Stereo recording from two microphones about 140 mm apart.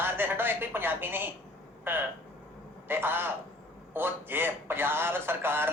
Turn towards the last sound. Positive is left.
turn(degrees=-15)  # may be behind; listen again after turning